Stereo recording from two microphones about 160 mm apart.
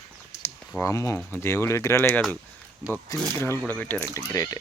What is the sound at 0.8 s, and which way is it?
Speech, 20° left (ahead or behind).